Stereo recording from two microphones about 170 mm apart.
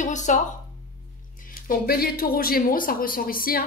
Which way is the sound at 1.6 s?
60° left (ahead or behind).